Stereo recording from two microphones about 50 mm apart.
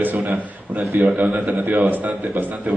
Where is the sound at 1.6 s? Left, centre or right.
Right.